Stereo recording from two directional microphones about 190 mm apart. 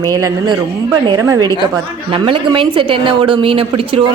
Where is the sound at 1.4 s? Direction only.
20° left (ahead or behind).